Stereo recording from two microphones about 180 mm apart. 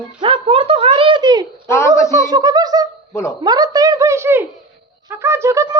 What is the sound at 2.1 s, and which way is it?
Speech, 20° right (ahead or behind).